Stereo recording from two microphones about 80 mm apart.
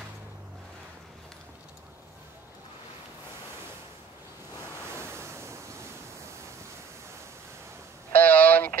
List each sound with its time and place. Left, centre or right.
4.9 s waves: right
8.1 s vehicle: left